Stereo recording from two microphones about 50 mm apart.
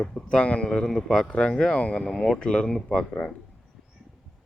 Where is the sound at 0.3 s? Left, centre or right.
Left.